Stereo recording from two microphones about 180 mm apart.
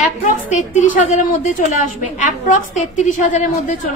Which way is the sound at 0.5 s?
45° left (ahead or behind).